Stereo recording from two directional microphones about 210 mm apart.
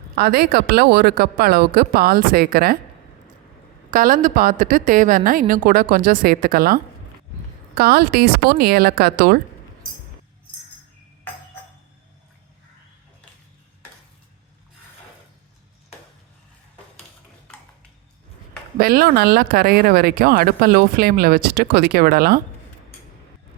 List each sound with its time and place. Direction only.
0.2 s speech: 50° right (ahead or behind)
3.9 s a woman's voice: 40° right (ahead or behind)
7.8 s speech: 50° right (ahead or behind)
18.8 s speech: 45° right (ahead or behind)